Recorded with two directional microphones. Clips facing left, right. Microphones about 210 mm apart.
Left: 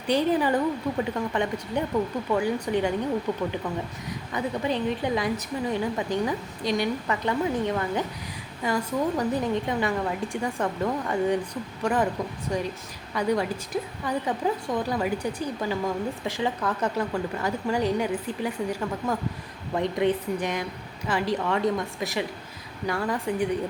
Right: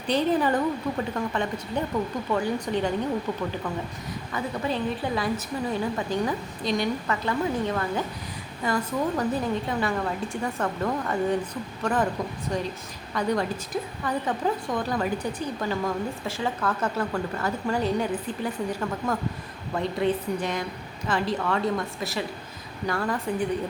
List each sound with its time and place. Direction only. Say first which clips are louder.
0.1 s a woman's voice: even; 10° left (ahead or behind)